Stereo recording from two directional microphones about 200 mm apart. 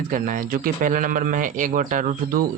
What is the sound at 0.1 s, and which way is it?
Speech, 45° right (ahead or behind).